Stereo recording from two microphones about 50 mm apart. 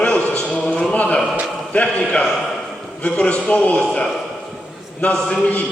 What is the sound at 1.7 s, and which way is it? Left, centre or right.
Speech, left.